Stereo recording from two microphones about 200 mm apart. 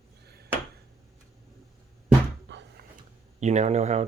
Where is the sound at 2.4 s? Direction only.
60° right (ahead or behind).